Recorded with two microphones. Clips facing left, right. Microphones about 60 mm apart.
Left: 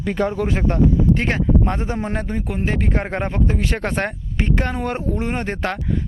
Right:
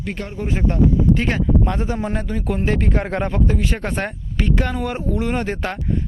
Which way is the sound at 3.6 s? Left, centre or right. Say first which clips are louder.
Left 1 dB; left.